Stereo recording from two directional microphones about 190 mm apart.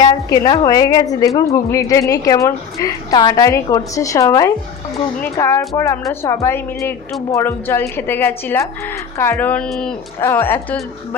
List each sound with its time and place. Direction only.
0.0 s a woman's voice: 20° left (ahead or behind)